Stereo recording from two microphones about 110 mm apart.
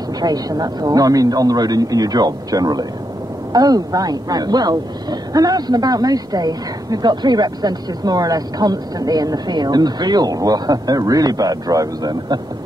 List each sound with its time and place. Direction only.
0.2 s speech: 35° right (ahead or behind)